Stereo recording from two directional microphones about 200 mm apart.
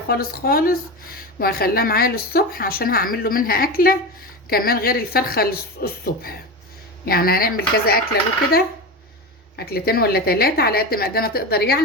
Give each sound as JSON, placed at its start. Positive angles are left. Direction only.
{"t": 0.1, "sound": "speech", "side_deg": 50}
{"t": 9.6, "sound": "speech", "side_deg": 50}